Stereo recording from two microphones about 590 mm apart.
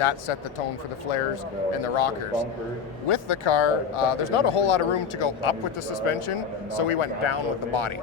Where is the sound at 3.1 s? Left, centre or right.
Left.